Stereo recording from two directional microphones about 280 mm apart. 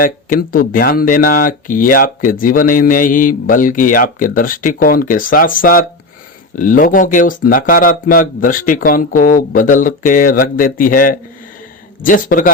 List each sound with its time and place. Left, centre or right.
0.0 s speech: left